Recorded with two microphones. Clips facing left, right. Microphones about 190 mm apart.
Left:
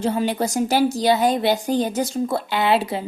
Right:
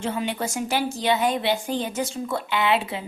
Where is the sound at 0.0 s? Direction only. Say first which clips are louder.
Left 6 dB; 35° left (ahead or behind).